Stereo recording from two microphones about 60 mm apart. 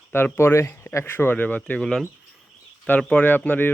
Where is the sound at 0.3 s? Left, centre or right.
Left.